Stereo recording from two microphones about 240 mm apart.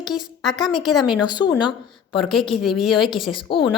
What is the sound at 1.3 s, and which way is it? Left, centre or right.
Speech, centre.